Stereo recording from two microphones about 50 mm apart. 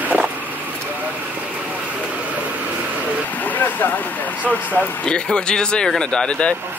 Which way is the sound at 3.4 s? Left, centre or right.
Left.